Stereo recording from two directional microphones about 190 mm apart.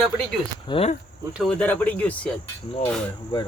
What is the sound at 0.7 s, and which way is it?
Speech, 30° left (ahead or behind).